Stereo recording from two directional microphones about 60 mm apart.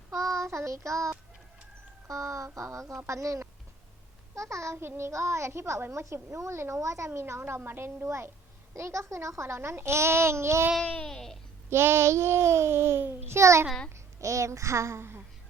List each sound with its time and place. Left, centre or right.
0.1 s child singing: right
2.0 s a sound: right
4.4 s a child's voice: right
6.3 s a sound: right
7.1 s a child's voice: right
8.0 s a child's voice: right
10.8 s babbling: centre
11.7 s a child's voice: right